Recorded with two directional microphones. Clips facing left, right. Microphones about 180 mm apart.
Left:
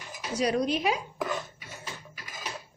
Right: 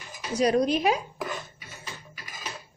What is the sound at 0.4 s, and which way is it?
Speech, 45° right (ahead or behind).